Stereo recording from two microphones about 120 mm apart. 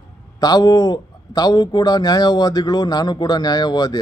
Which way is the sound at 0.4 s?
35° left (ahead or behind).